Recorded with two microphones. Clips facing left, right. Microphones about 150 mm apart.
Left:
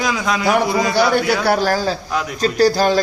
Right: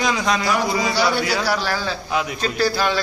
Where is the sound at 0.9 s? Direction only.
50° left (ahead or behind).